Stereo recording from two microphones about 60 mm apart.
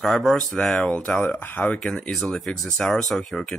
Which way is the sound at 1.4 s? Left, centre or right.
Left.